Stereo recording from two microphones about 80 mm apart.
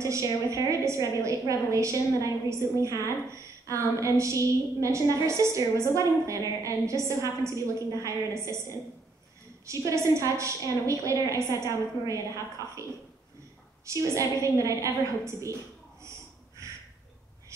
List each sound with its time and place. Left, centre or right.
0.0 s a woman's voice: right
13.8 s a woman's voice: right